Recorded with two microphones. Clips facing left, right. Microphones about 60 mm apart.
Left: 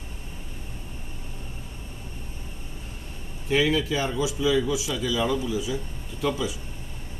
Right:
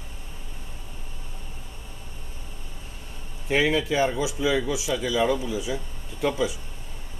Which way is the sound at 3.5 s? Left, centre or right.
Right.